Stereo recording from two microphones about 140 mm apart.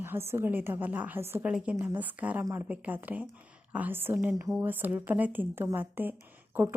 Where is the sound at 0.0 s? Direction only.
15° right (ahead or behind).